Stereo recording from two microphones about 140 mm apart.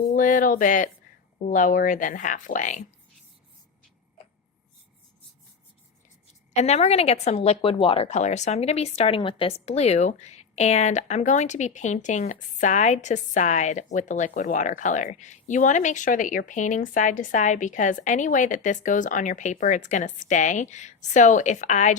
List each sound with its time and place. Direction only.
0.1 s speech: 70° left (ahead or behind)
6.5 s speech: 50° left (ahead or behind)